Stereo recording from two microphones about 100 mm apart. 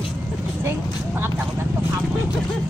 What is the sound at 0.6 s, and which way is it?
Vehicle, 20° right (ahead or behind).